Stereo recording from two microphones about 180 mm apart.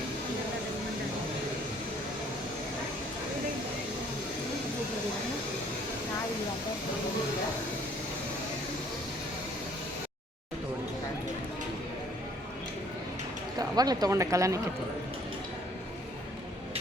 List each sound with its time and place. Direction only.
13.6 s speech: 20° right (ahead or behind)